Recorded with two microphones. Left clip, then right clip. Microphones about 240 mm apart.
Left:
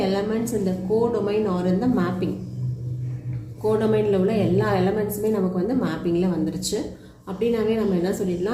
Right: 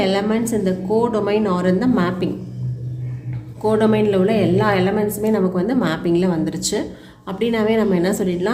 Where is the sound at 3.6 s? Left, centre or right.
Right.